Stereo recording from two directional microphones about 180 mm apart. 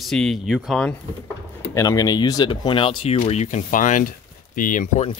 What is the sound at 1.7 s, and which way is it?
Speech, 20° left (ahead or behind).